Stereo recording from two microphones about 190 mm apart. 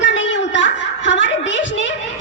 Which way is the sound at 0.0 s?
75° left (ahead or behind).